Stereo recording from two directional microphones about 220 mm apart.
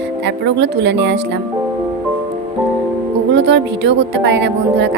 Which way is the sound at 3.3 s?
50° right (ahead or behind).